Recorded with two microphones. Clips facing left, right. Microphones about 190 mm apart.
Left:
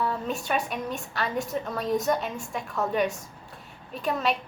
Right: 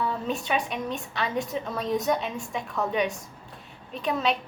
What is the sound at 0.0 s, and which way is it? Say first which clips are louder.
A woman's voice: even; centre (ahead or behind).